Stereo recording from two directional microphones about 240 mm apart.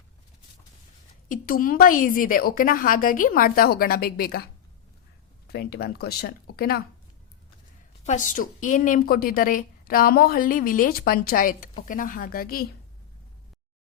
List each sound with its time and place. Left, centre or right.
1.3 s a woman's voice: left
5.5 s a woman's voice: left
8.0 s a woman's voice: left